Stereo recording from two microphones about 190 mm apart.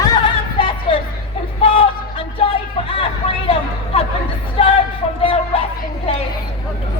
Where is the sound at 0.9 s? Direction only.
25° left (ahead or behind).